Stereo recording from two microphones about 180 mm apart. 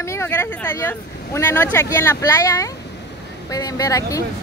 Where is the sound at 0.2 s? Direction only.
15° left (ahead or behind).